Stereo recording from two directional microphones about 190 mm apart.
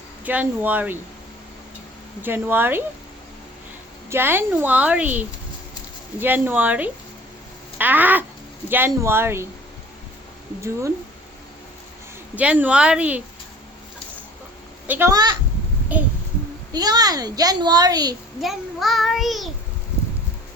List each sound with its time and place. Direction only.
0.3 s a woman's voice: 10° right (ahead or behind)
2.2 s a woman's voice: 10° right (ahead or behind)
4.1 s a woman's voice: 10° right (ahead or behind)
12.4 s a woman's voice: 5° right (ahead or behind)
14.8 s a child's voice: 10° right (ahead or behind)
15.1 s a child's voice: 20° right (ahead or behind)
15.9 s a woman's voice: 10° right (ahead or behind)
16.7 s a child's voice: 20° right (ahead or behind)
18.3 s a child's voice: centre (ahead or behind)